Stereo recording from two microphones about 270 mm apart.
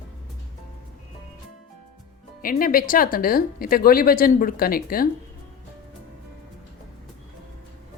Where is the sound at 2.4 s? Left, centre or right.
Left.